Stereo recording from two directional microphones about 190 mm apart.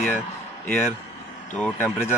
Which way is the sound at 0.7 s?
10° left (ahead or behind).